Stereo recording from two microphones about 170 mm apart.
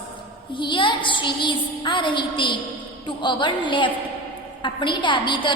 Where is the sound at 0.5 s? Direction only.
30° left (ahead or behind).